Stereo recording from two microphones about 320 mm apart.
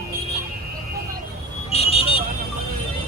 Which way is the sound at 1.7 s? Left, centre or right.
Centre.